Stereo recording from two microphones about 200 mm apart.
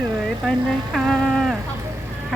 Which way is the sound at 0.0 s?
10° right (ahead or behind).